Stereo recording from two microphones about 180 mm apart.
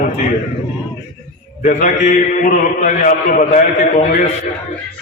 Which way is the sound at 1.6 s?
45° left (ahead or behind).